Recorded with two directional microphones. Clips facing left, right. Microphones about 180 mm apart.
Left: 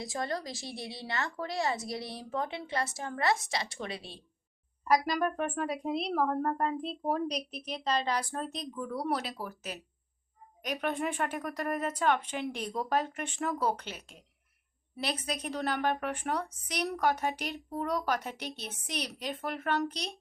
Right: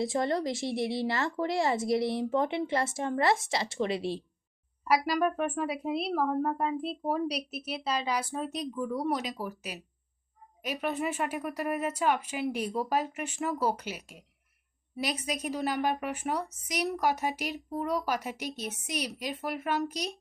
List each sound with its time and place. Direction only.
0.0 s a woman's voice: 25° right (ahead or behind)
4.9 s a woman's voice: 5° right (ahead or behind)